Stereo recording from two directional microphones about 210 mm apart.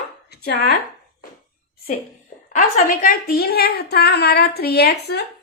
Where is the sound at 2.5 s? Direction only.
35° left (ahead or behind).